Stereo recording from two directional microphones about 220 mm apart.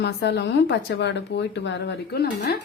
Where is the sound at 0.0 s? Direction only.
50° left (ahead or behind).